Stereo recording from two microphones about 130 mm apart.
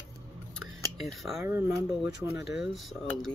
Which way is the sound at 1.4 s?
20° right (ahead or behind).